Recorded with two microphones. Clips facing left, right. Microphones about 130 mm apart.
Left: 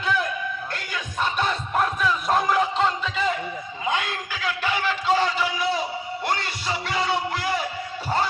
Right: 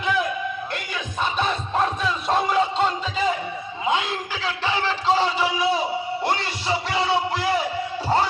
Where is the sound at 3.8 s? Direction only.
25° right (ahead or behind).